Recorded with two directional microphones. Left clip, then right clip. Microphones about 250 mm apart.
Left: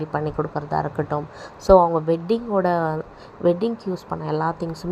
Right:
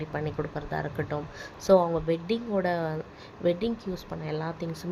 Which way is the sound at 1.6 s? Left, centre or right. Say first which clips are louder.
Left 7 dB; centre.